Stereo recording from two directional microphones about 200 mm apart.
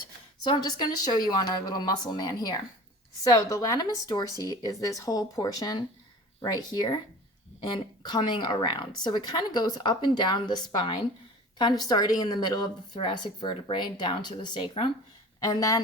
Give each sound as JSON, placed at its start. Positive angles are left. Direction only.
{"t": 0.4, "sound": "speech", "side_deg": 20}
{"t": 8.0, "sound": "speech", "side_deg": 20}